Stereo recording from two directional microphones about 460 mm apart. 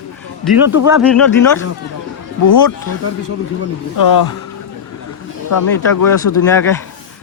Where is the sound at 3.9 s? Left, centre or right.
Left.